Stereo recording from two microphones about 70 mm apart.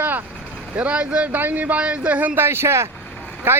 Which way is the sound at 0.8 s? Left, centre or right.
Centre.